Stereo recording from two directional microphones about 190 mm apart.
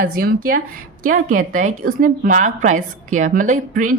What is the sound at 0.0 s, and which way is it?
A woman's voice, 50° right (ahead or behind).